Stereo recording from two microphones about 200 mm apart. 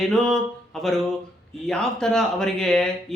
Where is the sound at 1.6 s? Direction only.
5° left (ahead or behind).